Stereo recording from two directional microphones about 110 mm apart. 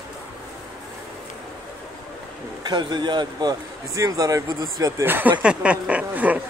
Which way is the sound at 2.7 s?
40° right (ahead or behind).